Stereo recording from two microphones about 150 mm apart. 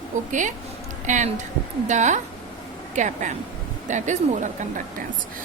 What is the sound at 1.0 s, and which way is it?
A woman's voice, 55° right (ahead or behind).